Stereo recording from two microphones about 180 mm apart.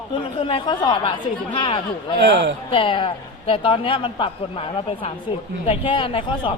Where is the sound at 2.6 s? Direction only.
30° left (ahead or behind).